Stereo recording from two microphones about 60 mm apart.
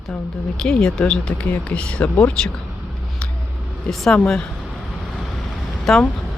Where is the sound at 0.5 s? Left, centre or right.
Centre.